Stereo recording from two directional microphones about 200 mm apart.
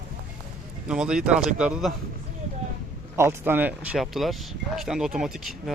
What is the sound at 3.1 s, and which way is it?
Speech, 10° right (ahead or behind).